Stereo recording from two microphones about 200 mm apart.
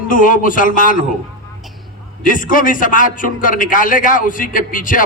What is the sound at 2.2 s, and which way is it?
A man's voice, 40° left (ahead or behind).